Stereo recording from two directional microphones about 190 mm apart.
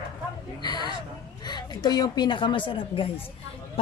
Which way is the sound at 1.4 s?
20° left (ahead or behind).